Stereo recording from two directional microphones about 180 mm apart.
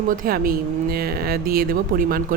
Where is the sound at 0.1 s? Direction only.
50° right (ahead or behind).